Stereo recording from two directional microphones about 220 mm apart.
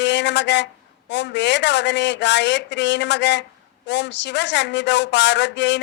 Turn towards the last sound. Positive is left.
turn(degrees=55)  # may be behind; listen again after turning